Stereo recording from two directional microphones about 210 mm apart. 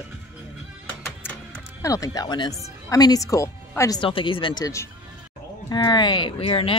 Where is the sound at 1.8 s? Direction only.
15° left (ahead or behind).